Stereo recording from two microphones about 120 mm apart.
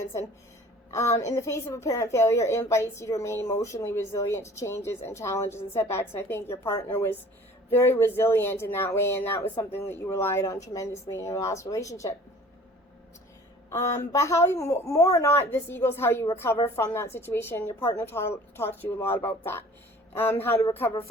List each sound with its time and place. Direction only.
0.9 s a woman's voice: 25° left (ahead or behind)
13.7 s a woman's voice: 25° left (ahead or behind)